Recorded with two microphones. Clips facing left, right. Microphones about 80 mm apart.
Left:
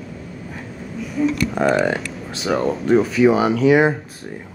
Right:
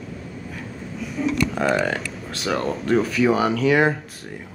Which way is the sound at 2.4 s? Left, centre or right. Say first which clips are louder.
Left 4 dB; centre.